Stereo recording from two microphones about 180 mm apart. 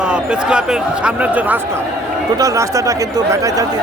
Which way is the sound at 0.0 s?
5° right (ahead or behind).